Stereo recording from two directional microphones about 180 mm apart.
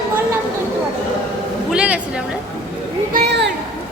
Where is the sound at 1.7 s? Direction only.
5° right (ahead or behind).